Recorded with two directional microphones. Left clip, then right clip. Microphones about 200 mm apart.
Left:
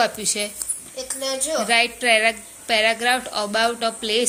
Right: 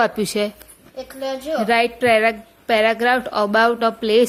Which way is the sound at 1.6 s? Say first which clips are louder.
Right 2 dB; 30° right (ahead or behind).